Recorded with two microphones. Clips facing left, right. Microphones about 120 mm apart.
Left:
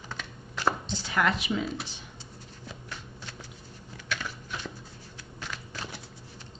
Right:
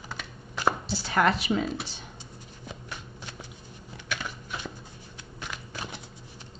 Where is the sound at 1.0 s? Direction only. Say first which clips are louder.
Right 3 dB; 40° right (ahead or behind).